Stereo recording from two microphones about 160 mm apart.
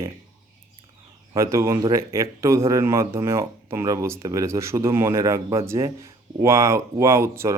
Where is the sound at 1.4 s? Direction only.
20° right (ahead or behind).